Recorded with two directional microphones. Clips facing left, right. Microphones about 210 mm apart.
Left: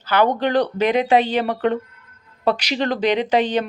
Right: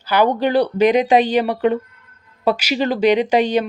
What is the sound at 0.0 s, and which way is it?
Speech, 10° right (ahead or behind).